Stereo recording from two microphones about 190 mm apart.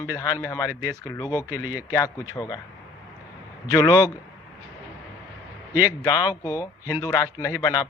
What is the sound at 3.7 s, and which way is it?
Speech, 20° left (ahead or behind).